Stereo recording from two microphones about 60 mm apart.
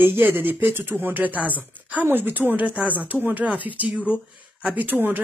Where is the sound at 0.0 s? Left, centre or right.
Right; by 4.7 s centre.